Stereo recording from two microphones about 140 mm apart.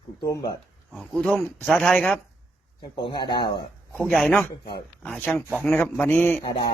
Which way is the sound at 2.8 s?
30° left (ahead or behind).